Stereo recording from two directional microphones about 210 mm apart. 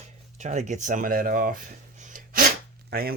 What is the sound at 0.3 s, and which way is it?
Speech, 35° right (ahead or behind).